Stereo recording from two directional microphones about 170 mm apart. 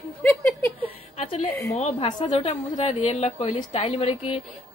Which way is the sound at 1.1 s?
40° left (ahead or behind).